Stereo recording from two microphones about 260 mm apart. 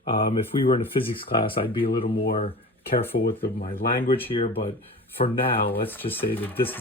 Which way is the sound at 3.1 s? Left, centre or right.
Left.